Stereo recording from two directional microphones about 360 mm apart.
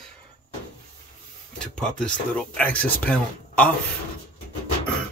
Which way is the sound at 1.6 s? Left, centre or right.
Centre.